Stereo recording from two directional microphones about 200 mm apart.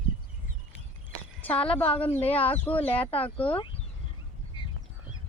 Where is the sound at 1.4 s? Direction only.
5° left (ahead or behind).